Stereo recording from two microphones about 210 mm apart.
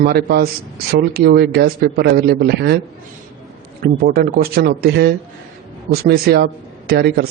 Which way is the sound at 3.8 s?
45° right (ahead or behind).